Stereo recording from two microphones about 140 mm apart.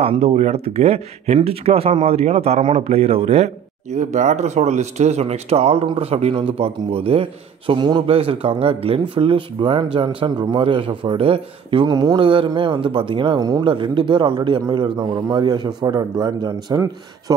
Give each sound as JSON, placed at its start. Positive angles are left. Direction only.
{"t": 0.0, "sound": "a man's voice", "side_deg": -45}